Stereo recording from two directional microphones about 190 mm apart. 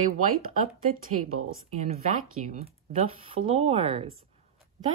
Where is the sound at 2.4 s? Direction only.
35° right (ahead or behind).